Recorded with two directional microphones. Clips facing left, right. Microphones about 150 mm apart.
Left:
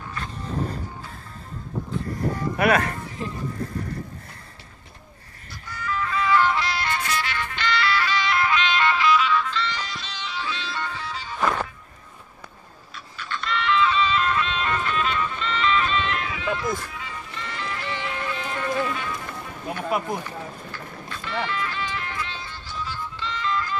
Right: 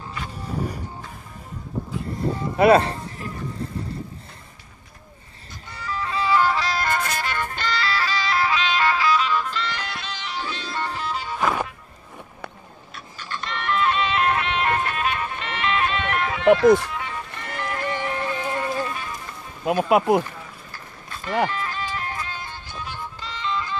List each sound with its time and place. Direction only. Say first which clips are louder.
0.1 s music: even; 10° right (ahead or behind)
2.3 s a sound: right 6 dB; 25° right (ahead or behind)
3.2 s speech: left 3 dB; 20° left (ahead or behind)
5.7 s music: left 1 dB; 30° right (ahead or behind)
9.7 s music: right 1 dB; 60° right (ahead or behind)
11.3 s music: even; 5° right (ahead or behind)
13.2 s music: left 3 dB; 40° right (ahead or behind)
19.6 s a sound: right 8 dB; 90° right
20.7 s music: left 3 dB; 45° right (ahead or behind)
23.1 s music: left 1 dB; 35° right (ahead or behind)